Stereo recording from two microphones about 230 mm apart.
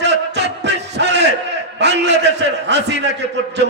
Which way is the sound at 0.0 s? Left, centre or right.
Right.